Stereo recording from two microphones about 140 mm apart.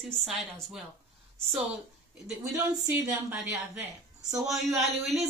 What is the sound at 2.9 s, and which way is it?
Speech, 15° right (ahead or behind).